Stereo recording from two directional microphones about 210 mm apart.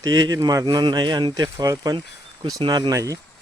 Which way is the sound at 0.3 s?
20° right (ahead or behind).